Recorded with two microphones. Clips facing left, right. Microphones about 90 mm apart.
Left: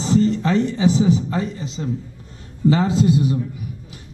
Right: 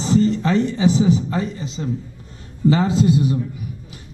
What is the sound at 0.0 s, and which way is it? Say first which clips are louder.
A man's voice: even; 10° right (ahead or behind).